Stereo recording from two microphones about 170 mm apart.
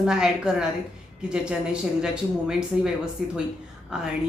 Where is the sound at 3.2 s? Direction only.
Centre (ahead or behind).